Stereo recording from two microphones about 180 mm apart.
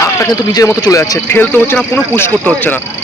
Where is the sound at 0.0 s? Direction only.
20° left (ahead or behind).